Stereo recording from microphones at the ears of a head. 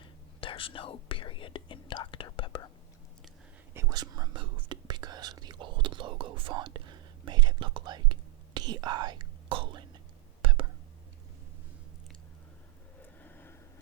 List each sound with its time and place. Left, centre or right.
0.3 s whispering: left
3.8 s whispering: right